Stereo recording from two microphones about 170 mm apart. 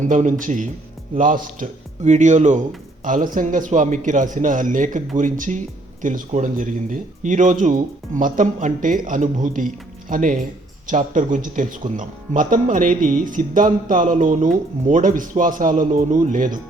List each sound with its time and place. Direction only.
0.0 s speech: 45° right (ahead or behind)